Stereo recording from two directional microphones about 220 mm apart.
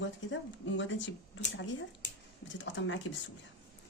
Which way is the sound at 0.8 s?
55° left (ahead or behind).